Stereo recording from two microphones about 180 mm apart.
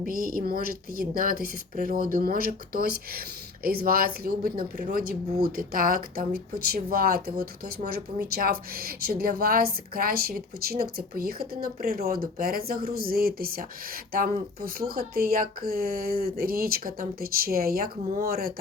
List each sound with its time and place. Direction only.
0.0 s a woman's voice: 50° right (ahead or behind)